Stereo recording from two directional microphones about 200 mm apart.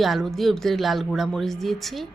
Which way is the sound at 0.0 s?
Centre (ahead or behind).